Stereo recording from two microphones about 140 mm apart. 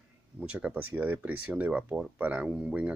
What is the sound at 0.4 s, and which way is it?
Speech, 10° right (ahead or behind).